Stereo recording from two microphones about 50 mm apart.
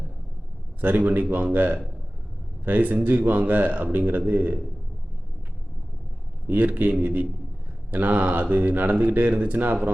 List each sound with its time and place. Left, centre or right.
0.8 s a man's voice: right
6.5 s a man's voice: right